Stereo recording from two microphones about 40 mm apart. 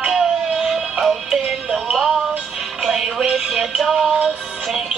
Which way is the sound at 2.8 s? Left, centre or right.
Centre.